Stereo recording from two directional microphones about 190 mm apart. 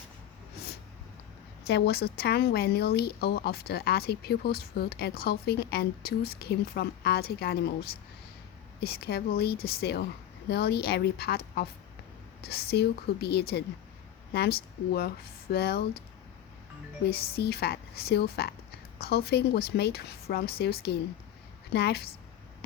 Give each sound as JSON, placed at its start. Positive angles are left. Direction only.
{"t": 1.6, "sound": "a woman's voice", "side_deg": 60}
{"t": 17.1, "sound": "speech", "side_deg": 55}